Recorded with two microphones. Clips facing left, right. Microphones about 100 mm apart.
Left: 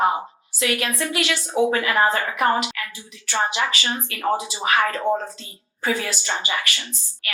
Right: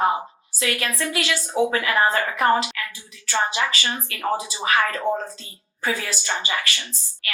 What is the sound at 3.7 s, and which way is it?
A woman's voice, 25° left (ahead or behind).